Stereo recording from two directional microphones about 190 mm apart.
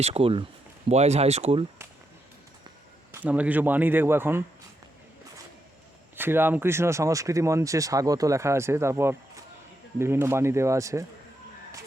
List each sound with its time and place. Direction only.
0.0 s speech: 30° right (ahead or behind)
3.1 s speech: 10° right (ahead or behind)
6.1 s speech: 10° right (ahead or behind)